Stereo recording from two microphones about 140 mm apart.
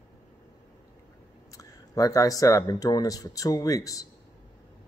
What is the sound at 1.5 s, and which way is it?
Speech, 25° left (ahead or behind).